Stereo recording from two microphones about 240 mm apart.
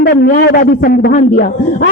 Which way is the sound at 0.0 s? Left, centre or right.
Left.